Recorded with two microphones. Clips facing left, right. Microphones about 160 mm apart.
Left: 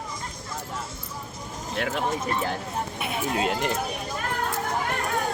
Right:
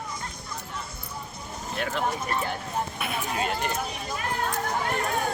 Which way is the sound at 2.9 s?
25° left (ahead or behind).